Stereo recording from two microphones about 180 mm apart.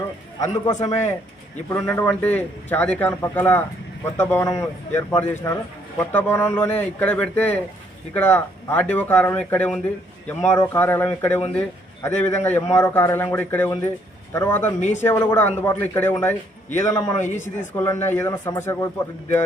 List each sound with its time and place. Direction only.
0.3 s a man's voice: 20° left (ahead or behind)
14.8 s speech: 40° left (ahead or behind)
15.0 s a man's voice: 15° left (ahead or behind)
17.3 s speech: 45° left (ahead or behind)
17.7 s a man's voice: 10° left (ahead or behind)